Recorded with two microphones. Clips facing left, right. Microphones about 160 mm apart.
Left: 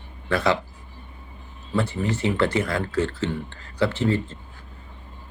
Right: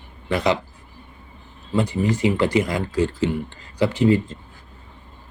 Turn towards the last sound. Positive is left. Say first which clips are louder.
# right 6 dB
turn(degrees=-15)  # may be behind; listen again after turning